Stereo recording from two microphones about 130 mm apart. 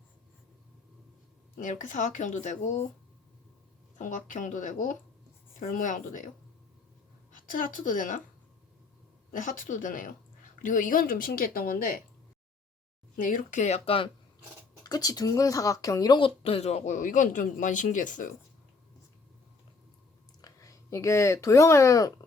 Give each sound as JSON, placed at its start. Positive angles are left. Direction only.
{"t": 1.5, "sound": "speech", "side_deg": 85}
{"t": 3.9, "sound": "speech", "side_deg": 70}
{"t": 5.5, "sound": "speech", "side_deg": 90}
{"t": 7.3, "sound": "a woman's voice", "side_deg": 90}
{"t": 9.3, "sound": "speech", "side_deg": 80}
{"t": 13.1, "sound": "speech", "side_deg": 85}
{"t": 14.8, "sound": "speech", "side_deg": 30}
{"t": 20.4, "sound": "speech", "side_deg": 25}